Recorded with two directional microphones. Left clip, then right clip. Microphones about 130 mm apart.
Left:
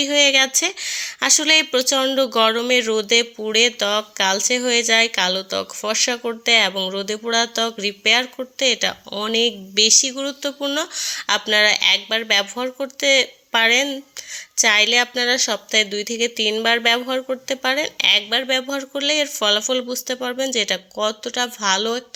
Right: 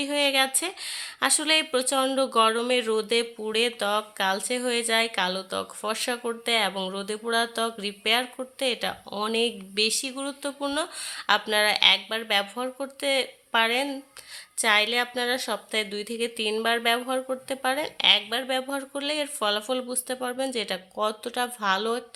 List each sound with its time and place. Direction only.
0.0 s speech: 20° left (ahead or behind)